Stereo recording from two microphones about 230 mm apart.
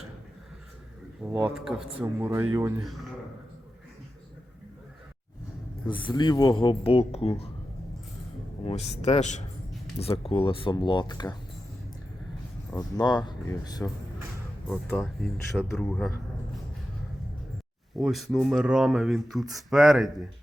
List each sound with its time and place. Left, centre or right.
1.2 s speech: centre
5.9 s speech: centre
8.6 s speech: left
12.7 s speech: centre
14.7 s speech: centre
17.9 s speech: centre